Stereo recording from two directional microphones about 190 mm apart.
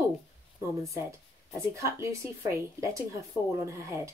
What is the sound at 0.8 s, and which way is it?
Speech, 15° right (ahead or behind).